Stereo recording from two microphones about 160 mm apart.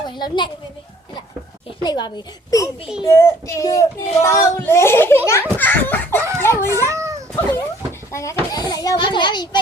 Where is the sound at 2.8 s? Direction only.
5° right (ahead or behind).